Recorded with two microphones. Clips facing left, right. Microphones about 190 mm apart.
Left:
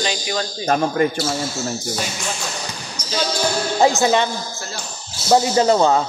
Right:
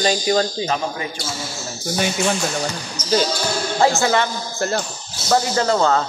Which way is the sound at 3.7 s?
15° left (ahead or behind).